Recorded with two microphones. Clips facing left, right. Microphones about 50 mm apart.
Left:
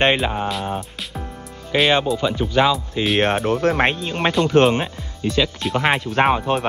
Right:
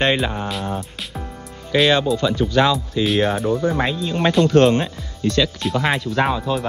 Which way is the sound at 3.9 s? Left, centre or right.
Left.